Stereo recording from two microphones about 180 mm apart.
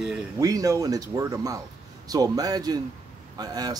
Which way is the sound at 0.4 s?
20° right (ahead or behind).